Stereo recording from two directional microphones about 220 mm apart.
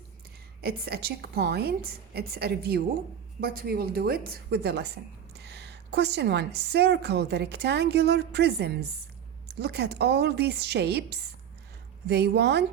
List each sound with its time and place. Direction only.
0.6 s a woman's voice: 45° right (ahead or behind)